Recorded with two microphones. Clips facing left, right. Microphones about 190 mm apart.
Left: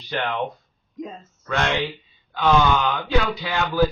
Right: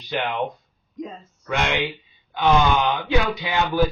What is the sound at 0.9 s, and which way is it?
Speech, centre (ahead or behind).